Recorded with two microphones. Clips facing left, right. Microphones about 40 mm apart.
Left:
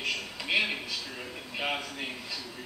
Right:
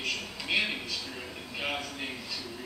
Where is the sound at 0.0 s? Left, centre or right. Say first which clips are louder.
Left 1 dB; centre.